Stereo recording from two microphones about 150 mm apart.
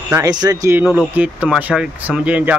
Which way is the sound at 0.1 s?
25° right (ahead or behind).